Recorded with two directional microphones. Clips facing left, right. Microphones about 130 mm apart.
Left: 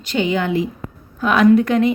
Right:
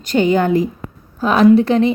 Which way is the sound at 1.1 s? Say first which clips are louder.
Right 2 dB; 35° right (ahead or behind).